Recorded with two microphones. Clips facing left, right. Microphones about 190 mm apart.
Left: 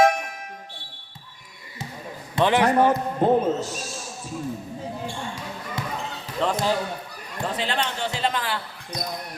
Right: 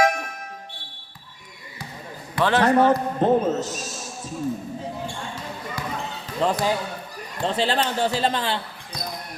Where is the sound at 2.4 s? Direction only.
15° left (ahead or behind).